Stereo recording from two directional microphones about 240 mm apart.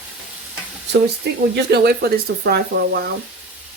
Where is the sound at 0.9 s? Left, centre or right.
Right.